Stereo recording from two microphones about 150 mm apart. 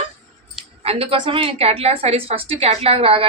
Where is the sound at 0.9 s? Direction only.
35° right (ahead or behind).